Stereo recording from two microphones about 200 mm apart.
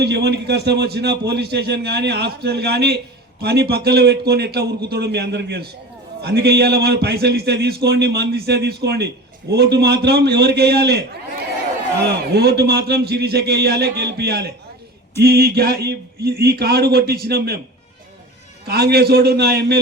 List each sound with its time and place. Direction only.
0.0 s a man's voice: 55° right (ahead or behind)
18.7 s a man's voice: 50° right (ahead or behind)